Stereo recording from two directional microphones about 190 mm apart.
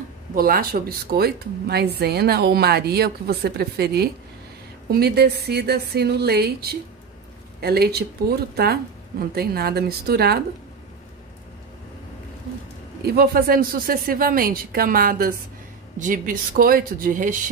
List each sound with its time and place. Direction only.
0.3 s speech: 50° right (ahead or behind)
13.0 s speech: 55° right (ahead or behind)